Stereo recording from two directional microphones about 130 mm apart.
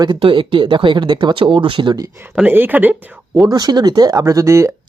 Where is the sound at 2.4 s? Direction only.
15° right (ahead or behind).